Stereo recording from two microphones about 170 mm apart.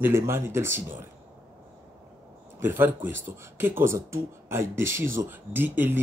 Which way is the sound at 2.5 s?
10° right (ahead or behind).